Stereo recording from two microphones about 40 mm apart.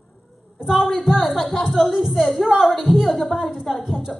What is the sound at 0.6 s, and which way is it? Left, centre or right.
A woman's voice, centre.